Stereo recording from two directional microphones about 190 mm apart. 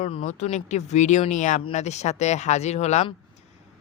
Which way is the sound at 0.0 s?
30° left (ahead or behind).